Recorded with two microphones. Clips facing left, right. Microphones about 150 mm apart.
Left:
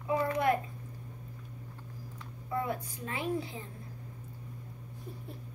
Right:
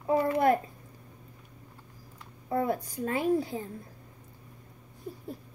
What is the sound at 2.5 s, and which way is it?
A child's voice, 40° right (ahead or behind).